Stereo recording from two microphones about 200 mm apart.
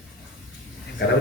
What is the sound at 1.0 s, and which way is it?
Speech, 55° left (ahead or behind).